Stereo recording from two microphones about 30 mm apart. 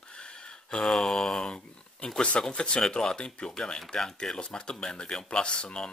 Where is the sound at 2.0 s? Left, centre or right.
Left.